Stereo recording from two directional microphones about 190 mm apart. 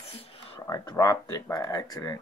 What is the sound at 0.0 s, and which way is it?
Whispering, 30° left (ahead or behind).